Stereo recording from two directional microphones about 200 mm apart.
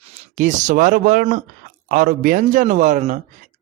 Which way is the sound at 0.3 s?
35° right (ahead or behind).